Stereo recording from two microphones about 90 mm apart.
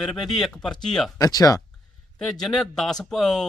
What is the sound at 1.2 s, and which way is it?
Speech, 45° left (ahead or behind).